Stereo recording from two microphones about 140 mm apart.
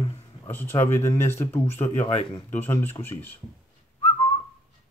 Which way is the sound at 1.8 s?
55° left (ahead or behind).